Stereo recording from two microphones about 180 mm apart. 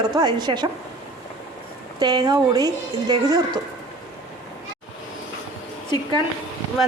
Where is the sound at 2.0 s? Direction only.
20° right (ahead or behind).